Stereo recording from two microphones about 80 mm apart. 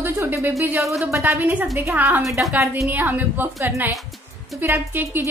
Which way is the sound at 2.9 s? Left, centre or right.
Right.